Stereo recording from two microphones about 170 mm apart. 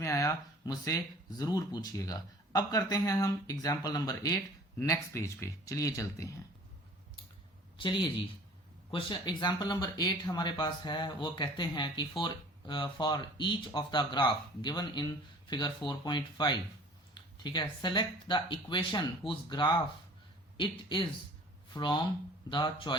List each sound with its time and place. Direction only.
0.0 s speech: 20° left (ahead or behind)
7.8 s a man's voice: 30° left (ahead or behind)